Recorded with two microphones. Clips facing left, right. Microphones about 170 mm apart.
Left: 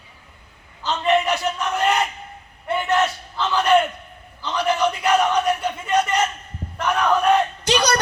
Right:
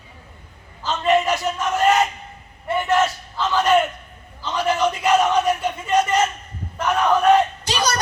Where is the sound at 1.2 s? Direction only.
Centre (ahead or behind).